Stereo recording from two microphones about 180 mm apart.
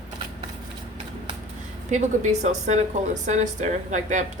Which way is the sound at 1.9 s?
40° right (ahead or behind).